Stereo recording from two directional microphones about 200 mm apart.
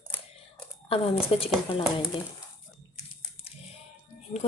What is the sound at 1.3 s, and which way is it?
Speech, 30° left (ahead or behind).